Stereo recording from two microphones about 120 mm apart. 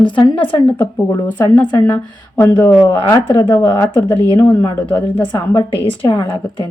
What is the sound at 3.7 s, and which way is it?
Speech, 40° left (ahead or behind).